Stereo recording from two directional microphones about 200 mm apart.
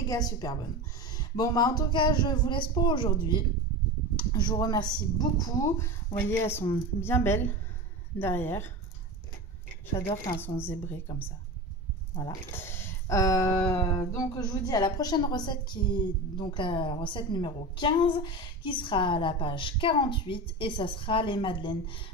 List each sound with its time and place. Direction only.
0.1 s speech: 20° left (ahead or behind)
10.6 s speech: 10° left (ahead or behind)